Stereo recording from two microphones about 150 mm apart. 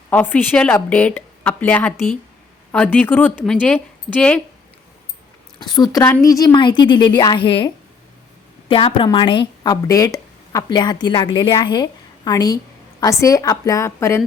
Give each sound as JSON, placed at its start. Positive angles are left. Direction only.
{"t": 0.1, "sound": "a woman's voice", "side_deg": 10}
{"t": 5.5, "sound": "a woman's voice", "side_deg": 30}
{"t": 8.7, "sound": "a woman's voice", "side_deg": 35}